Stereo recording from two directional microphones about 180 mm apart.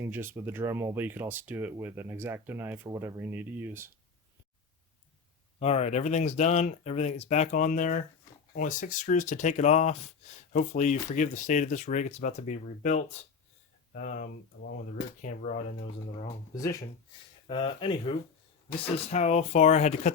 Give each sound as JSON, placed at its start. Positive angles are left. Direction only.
{"t": 0.0, "sound": "speech", "side_deg": -15}
{"t": 5.5, "sound": "speech", "side_deg": 35}
{"t": 17.4, "sound": "speech", "side_deg": 30}
{"t": 19.1, "sound": "speech", "side_deg": 40}